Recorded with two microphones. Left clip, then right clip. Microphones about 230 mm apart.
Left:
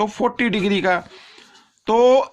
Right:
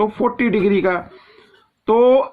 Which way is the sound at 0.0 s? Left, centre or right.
Left.